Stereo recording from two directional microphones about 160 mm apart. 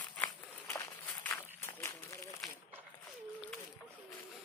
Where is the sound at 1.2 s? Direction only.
15° left (ahead or behind).